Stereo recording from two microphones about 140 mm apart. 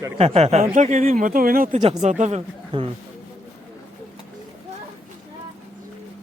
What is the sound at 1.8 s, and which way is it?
Speech, 50° right (ahead or behind).